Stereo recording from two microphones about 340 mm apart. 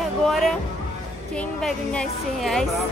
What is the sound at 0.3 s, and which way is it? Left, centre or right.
Music, centre.